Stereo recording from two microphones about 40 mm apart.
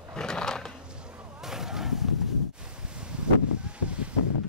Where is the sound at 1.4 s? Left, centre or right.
Centre.